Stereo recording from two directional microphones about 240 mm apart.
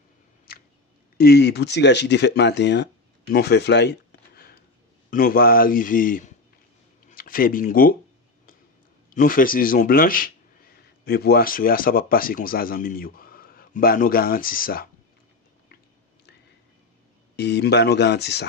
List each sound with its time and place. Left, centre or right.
1.2 s speech: left
4.4 s a sound: left
5.1 s a man's voice: left
9.1 s speech: left
17.3 s speech: left